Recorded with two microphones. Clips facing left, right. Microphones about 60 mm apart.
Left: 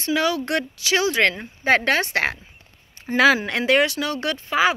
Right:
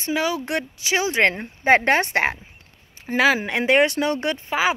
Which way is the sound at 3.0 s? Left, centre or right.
Centre.